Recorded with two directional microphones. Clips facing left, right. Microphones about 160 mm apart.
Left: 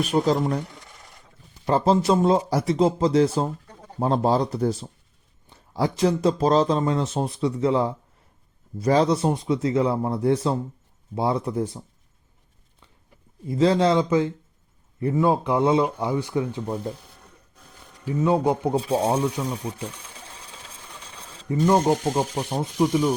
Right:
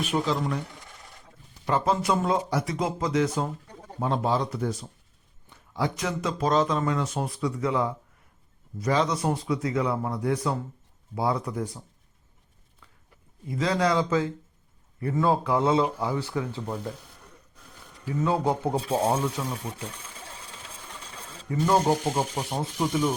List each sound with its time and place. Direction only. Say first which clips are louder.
0.0 s speech: left 5 dB; 40° left (ahead or behind)
1.6 s speech: left 5 dB; 30° left (ahead or behind)
13.5 s speech: left 6 dB; 30° left (ahead or behind)
18.0 s speech: left 4 dB; 15° left (ahead or behind)
21.5 s speech: left 4 dB; 25° left (ahead or behind)
22.1 s speech: left 3 dB; 10° left (ahead or behind)
22.8 s speech: left 5 dB; 20° left (ahead or behind)